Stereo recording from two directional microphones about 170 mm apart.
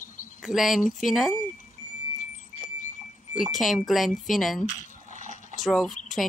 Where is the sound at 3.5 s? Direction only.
Centre (ahead or behind).